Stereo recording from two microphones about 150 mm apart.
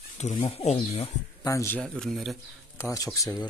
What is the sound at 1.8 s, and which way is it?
Speech, centre (ahead or behind).